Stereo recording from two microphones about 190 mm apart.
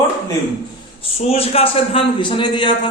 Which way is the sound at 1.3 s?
30° left (ahead or behind).